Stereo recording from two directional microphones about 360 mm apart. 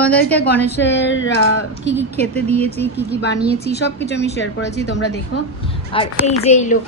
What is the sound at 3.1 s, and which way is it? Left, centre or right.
A woman's voice, left.